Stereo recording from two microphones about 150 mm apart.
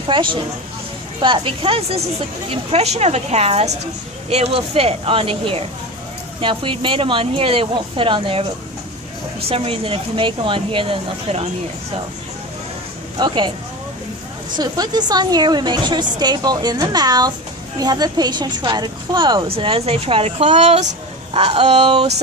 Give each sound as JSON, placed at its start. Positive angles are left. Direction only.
{"t": 0.1, "sound": "a woman's voice", "side_deg": -35}
{"t": 9.5, "sound": "a woman's voice", "side_deg": -40}
{"t": 13.1, "sound": "speech", "side_deg": -30}
{"t": 14.5, "sound": "a woman's voice", "side_deg": -30}